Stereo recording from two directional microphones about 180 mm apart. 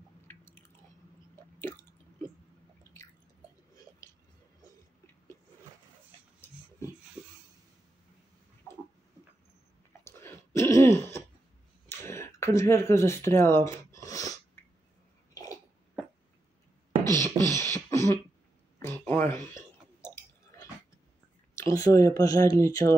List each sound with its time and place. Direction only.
0.3 s chewing: 15° left (ahead or behind)
10.0 s throat clearing: 15° left (ahead or behind)
11.9 s a sound: 15° left (ahead or behind)
17.0 s beatboxing: 20° right (ahead or behind)
17.4 s beatboxing: 15° left (ahead or behind)
18.8 s chewing: 10° left (ahead or behind)
21.5 s speech: 15° left (ahead or behind)